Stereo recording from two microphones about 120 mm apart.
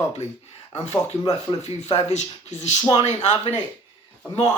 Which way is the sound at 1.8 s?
65° left (ahead or behind).